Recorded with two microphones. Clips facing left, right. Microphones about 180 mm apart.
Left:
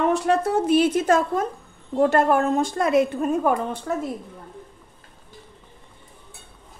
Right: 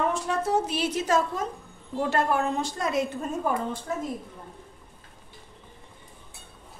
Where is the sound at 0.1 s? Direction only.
65° left (ahead or behind).